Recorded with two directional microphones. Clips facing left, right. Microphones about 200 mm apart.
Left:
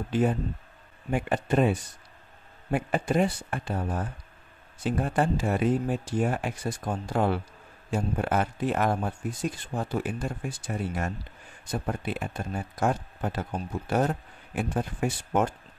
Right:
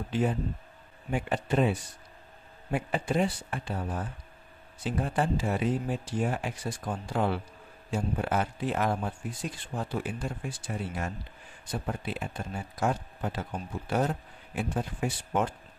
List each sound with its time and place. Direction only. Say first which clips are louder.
1.1 s speech: left 3 dB; 50° left (ahead or behind)